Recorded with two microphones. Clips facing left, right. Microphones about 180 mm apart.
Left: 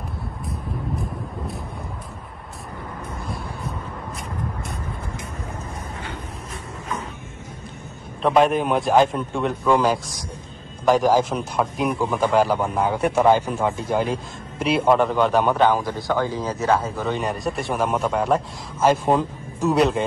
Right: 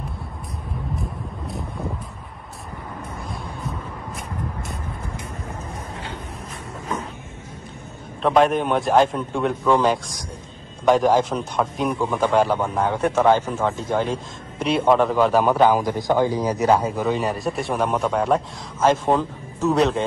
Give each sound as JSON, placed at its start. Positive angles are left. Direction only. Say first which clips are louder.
{"t": 8.2, "sound": "speech", "louder": "even", "side_deg": 0}
{"t": 15.8, "sound": "a man's voice", "louder": "right 4 dB", "side_deg": -15}
{"t": 17.1, "sound": "speech", "louder": "right 2 dB", "side_deg": 0}